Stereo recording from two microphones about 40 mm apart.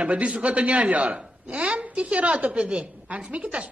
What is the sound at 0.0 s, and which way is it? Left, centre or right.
A man's voice, right.